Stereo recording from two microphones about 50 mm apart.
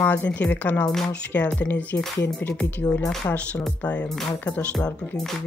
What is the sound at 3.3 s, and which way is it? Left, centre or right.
Speech, left.